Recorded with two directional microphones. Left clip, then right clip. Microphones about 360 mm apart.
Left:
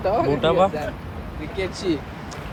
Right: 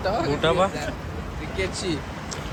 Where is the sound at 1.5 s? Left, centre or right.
Centre.